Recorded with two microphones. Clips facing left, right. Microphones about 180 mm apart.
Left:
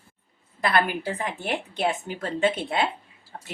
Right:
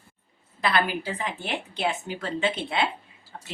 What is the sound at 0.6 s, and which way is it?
A woman's voice, 50° left (ahead or behind).